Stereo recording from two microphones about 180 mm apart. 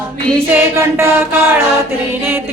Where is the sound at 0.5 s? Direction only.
15° right (ahead or behind).